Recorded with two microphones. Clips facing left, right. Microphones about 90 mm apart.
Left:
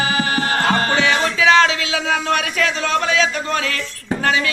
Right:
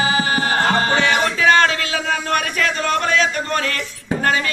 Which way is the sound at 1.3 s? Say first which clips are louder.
Left 2 dB; 45° right (ahead or behind).